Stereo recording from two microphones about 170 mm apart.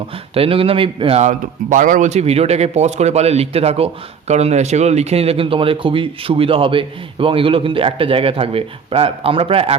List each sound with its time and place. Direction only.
0.3 s a man's voice: 35° right (ahead or behind)